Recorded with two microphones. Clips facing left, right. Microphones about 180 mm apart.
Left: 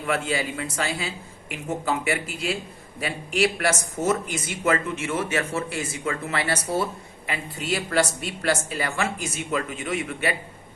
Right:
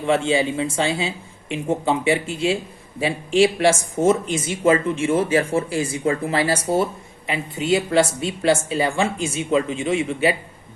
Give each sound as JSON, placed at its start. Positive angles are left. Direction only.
{"t": 0.0, "sound": "speech", "side_deg": -25}